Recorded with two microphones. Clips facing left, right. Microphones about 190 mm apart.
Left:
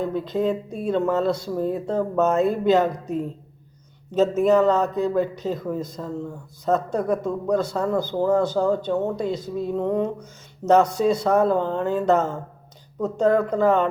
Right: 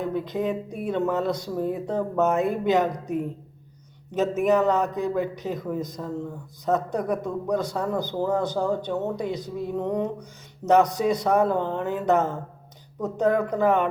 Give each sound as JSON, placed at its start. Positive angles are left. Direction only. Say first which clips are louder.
{"t": 0.0, "sound": "a man's voice", "louder": "left 3 dB", "side_deg": -15}